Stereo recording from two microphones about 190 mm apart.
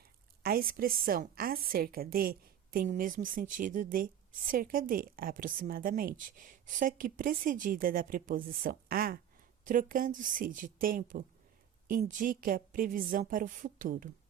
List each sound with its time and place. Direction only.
0.0 s a woman's voice: 55° right (ahead or behind)